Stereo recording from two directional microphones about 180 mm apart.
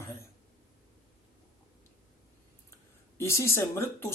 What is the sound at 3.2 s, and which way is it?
Speech, 15° left (ahead or behind).